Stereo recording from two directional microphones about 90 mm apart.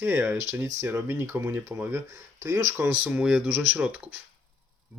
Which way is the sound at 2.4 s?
35° right (ahead or behind).